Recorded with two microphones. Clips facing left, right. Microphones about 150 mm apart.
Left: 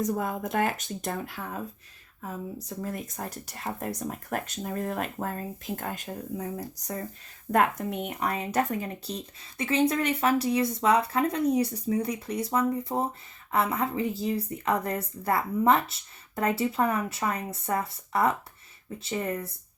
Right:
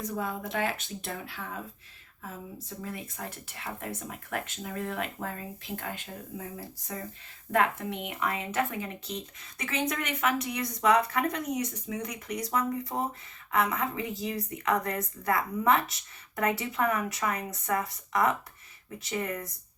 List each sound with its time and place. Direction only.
0.0 s speech: 45° left (ahead or behind)
9.6 s speech: 30° left (ahead or behind)